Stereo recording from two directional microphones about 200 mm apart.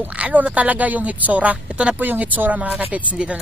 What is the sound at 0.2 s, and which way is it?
A woman's voice, 5° right (ahead or behind).